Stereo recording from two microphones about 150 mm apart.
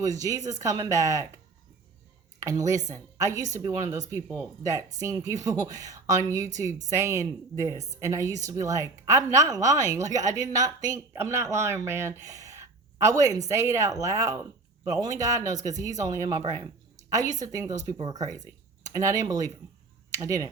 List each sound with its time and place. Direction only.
0.0 s a woman's voice: 25° right (ahead or behind)
2.4 s a woman's voice: 20° right (ahead or behind)